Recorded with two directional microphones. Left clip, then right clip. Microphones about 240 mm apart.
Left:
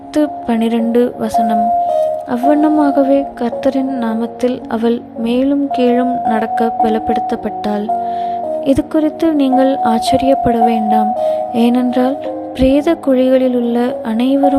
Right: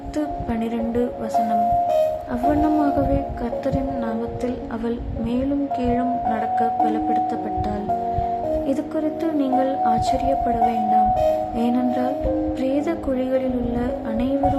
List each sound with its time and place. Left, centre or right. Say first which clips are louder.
0.2 s a woman's voice: left 10 dB; left